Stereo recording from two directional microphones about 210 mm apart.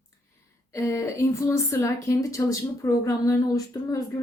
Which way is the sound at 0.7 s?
15° left (ahead or behind).